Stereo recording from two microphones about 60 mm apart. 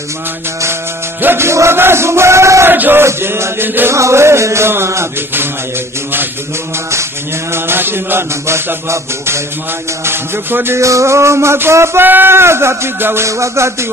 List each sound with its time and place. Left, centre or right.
1.2 s music: right
2.7 s mantra: right
3.1 s mantra: right
3.9 s music: right
7.5 s music: right
10.0 s mantra: right
10.8 s music: right
13.3 s a sound: right